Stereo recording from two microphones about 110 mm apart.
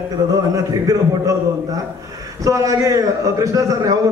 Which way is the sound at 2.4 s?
30° right (ahead or behind).